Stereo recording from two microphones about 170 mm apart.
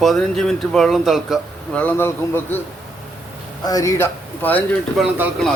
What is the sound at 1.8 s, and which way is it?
Speech, 10° left (ahead or behind).